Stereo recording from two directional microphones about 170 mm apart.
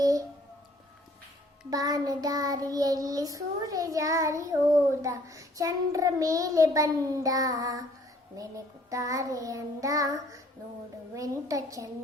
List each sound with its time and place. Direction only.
0.0 s speech: 20° right (ahead or behind)
1.7 s child singing: 20° right (ahead or behind)